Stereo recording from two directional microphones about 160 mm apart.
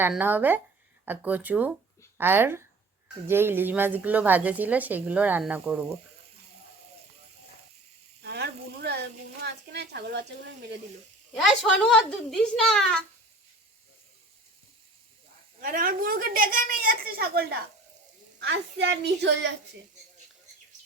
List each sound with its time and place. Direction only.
0.1 s speech: 10° right (ahead or behind)
8.2 s sizzle: 90° right
9.4 s a woman's voice: 90° right
11.3 s speech: centre (ahead or behind)
15.6 s a woman's voice: 60° right (ahead or behind)
18.3 s a woman's voice: 90° right